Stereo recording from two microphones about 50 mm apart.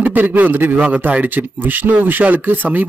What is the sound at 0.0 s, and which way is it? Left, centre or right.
Speech, right.